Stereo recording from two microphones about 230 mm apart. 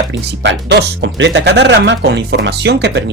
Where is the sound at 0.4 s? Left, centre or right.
Right.